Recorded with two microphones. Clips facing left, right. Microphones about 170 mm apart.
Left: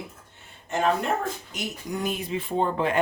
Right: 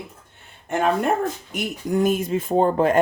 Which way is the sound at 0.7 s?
55° right (ahead or behind).